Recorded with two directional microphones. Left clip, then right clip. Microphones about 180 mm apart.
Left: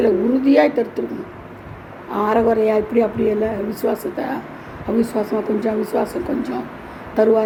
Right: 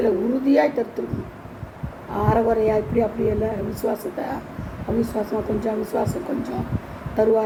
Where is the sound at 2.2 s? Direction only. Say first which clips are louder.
Left 3 dB; 30° left (ahead or behind).